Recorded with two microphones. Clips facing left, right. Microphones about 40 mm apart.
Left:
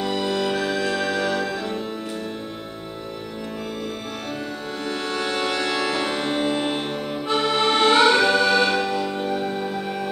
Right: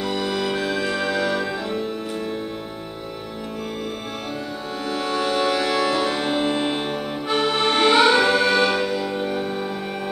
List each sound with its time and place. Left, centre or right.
0.0 s music: centre
4.8 s music: centre
6.2 s accordion: centre